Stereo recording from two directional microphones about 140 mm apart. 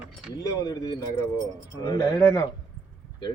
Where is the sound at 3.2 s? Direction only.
30° left (ahead or behind).